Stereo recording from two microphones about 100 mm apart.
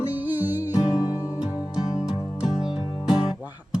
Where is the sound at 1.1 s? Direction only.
35° left (ahead or behind).